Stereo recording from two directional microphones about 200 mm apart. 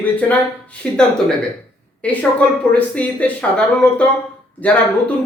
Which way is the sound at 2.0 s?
5° left (ahead or behind).